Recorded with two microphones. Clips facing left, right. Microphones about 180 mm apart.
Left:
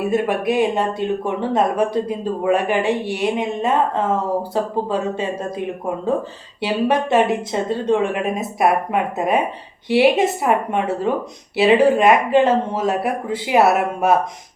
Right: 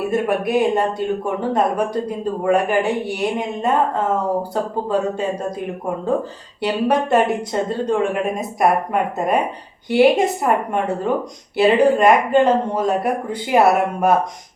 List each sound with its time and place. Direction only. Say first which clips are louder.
0.1 s speech: right 1 dB; centre (ahead or behind)
6.6 s speech: even; centre (ahead or behind)